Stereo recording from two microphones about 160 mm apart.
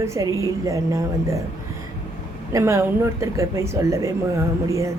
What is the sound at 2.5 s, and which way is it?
Speech, 15° right (ahead or behind).